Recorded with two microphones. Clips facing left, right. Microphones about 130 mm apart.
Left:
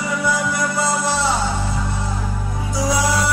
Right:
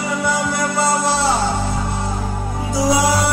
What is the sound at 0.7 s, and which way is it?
Music, 30° right (ahead or behind).